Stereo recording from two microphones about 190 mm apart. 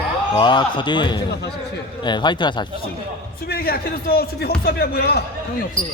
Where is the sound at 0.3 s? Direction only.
25° left (ahead or behind).